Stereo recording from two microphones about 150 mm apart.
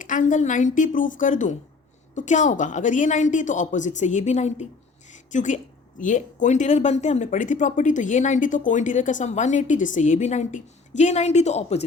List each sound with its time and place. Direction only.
0.0 s speech: 60° left (ahead or behind)
5.1 s a sound: 55° left (ahead or behind)
6.0 s speech: 55° left (ahead or behind)